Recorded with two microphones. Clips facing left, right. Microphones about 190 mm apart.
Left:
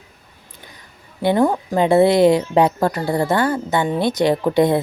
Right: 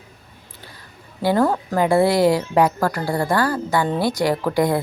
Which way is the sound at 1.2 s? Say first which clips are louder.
Left 2 dB; 20° left (ahead or behind).